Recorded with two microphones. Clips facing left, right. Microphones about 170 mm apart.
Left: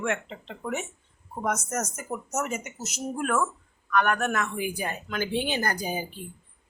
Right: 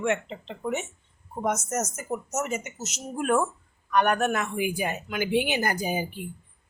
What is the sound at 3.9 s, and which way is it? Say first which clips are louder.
Speech: right 2 dB; 20° right (ahead or behind).